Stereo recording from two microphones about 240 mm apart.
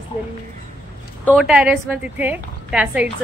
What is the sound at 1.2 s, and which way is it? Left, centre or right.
A woman's voice, centre.